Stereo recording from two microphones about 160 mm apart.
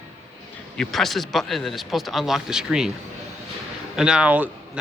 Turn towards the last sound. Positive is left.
turn(degrees=-10)  # may be behind; listen again after turning